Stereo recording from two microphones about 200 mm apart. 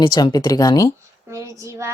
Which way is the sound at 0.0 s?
20° left (ahead or behind).